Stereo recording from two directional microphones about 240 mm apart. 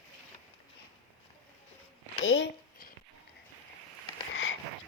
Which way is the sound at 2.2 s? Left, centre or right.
Left.